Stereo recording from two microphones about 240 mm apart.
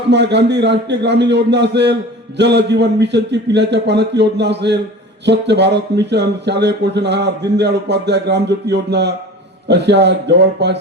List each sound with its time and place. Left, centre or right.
0.1 s speech: right